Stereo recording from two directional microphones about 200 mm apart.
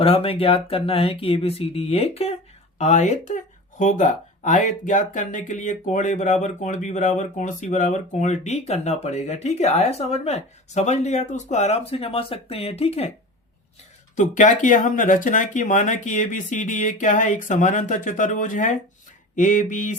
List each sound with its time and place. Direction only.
0.0 s speech: 30° left (ahead or behind)
14.2 s speech: 40° left (ahead or behind)